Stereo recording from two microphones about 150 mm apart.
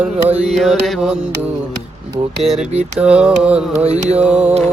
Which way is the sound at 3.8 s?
45° right (ahead or behind).